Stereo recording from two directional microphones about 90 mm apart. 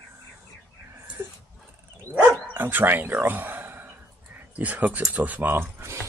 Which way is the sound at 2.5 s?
20° right (ahead or behind).